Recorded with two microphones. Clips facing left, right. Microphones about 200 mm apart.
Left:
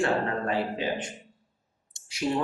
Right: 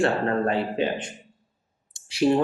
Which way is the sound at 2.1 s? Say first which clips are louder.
Right 8 dB; 30° right (ahead or behind).